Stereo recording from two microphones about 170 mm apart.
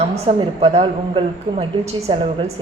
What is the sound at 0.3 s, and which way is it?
A woman's voice, 30° right (ahead or behind).